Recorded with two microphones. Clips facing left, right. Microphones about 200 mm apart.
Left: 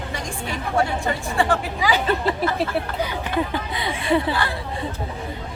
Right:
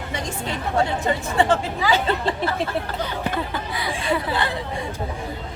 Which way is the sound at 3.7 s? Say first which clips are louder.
Left 3 dB; 25° left (ahead or behind).